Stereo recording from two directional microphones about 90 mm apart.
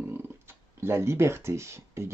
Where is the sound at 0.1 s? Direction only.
25° right (ahead or behind).